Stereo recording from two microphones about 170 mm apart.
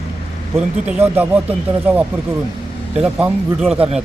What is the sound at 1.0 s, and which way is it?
Speech, 10° right (ahead or behind).